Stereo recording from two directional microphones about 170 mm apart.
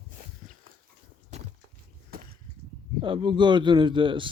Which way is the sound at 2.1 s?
60° right (ahead or behind).